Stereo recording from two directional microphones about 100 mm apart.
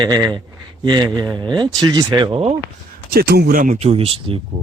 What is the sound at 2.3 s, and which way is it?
Speech, 90° right.